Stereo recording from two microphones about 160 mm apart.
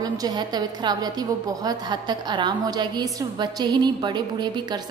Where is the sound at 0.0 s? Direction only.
25° right (ahead or behind).